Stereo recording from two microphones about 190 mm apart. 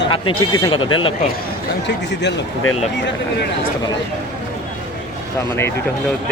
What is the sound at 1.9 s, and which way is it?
Speech, 65° left (ahead or behind).